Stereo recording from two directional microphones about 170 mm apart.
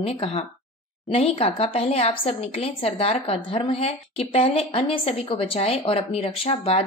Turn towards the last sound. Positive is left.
turn(degrees=35)  # may be behind; listen again after turning